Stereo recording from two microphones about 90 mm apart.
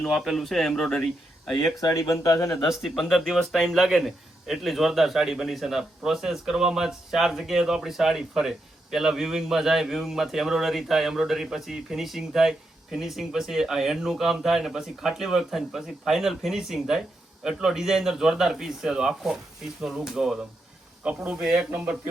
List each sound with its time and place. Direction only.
0.0 s a man's voice: centre (ahead or behind)
1.8 s speech: 35° left (ahead or behind)
2.6 s a man's voice: 5° right (ahead or behind)
21.7 s speech: 20° right (ahead or behind)